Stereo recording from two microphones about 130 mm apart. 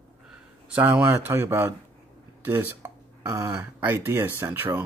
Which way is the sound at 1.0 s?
20° right (ahead or behind).